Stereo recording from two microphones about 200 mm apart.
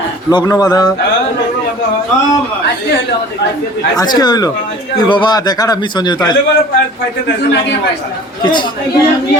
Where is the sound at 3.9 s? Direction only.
20° left (ahead or behind).